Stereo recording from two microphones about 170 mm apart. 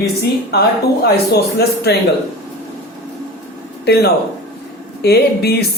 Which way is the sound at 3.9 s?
70° left (ahead or behind).